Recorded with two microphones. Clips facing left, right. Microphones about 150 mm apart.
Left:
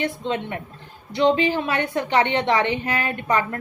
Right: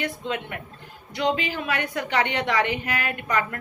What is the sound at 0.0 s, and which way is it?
A woman's voice, 25° left (ahead or behind).